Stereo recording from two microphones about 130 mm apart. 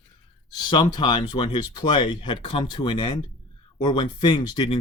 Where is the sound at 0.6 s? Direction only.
35° left (ahead or behind).